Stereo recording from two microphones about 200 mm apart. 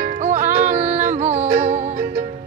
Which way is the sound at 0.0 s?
40° right (ahead or behind).